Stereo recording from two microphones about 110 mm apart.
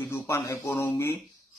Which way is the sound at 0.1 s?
25° left (ahead or behind).